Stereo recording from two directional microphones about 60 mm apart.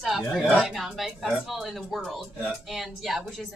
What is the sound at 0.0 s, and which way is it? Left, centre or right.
A woman's voice, centre.